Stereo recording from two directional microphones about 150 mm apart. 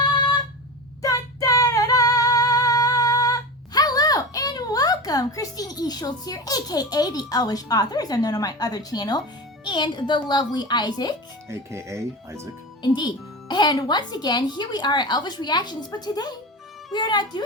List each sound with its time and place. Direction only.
1.0 s female singing: 20° left (ahead or behind)
9.6 s speech: 30° left (ahead or behind)
11.4 s speech: 20° right (ahead or behind)
12.8 s speech: 30° left (ahead or behind)